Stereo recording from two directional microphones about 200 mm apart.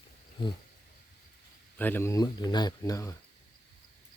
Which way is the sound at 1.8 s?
10° left (ahead or behind).